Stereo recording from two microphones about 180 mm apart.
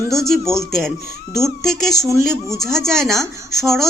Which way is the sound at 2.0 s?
15° right (ahead or behind).